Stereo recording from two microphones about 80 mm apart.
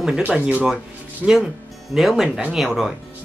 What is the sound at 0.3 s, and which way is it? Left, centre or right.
Speech, centre.